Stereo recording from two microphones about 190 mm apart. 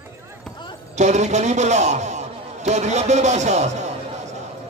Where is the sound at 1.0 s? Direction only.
35° right (ahead or behind).